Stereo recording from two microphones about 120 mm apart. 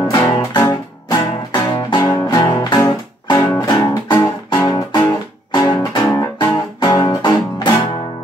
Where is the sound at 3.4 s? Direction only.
25° left (ahead or behind).